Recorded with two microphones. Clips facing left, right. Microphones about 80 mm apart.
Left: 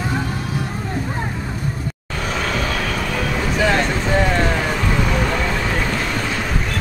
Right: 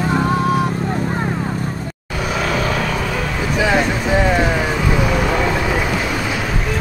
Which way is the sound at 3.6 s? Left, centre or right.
Centre.